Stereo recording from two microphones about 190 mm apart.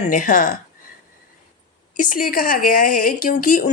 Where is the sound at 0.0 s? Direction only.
45° left (ahead or behind).